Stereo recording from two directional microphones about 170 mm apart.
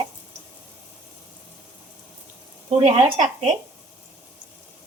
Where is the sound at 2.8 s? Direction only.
40° right (ahead or behind).